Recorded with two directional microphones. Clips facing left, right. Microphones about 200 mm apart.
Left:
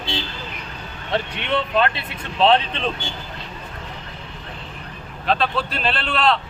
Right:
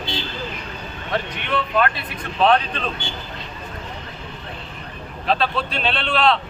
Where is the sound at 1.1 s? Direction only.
25° left (ahead or behind).